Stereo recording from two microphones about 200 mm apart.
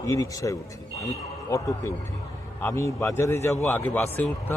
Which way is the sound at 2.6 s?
15° left (ahead or behind).